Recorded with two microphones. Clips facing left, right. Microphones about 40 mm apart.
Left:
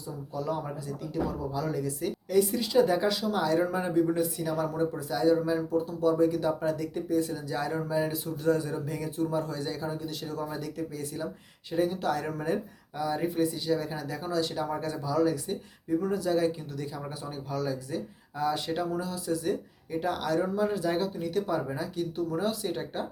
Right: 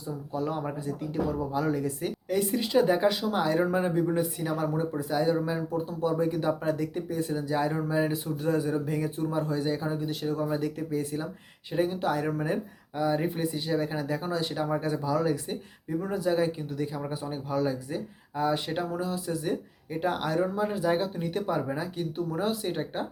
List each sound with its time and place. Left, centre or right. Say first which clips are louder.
0.3 s speech: right 1 dB; right